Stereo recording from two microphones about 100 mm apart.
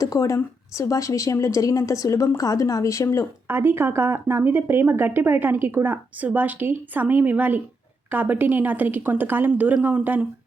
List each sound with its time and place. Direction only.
0.0 s speech: 35° left (ahead or behind)
3.5 s a woman's voice: 25° right (ahead or behind)